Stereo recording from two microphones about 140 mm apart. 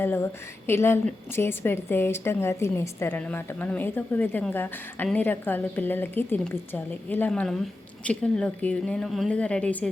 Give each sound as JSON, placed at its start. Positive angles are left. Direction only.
{"t": 0.0, "sound": "a woman's voice", "side_deg": 15}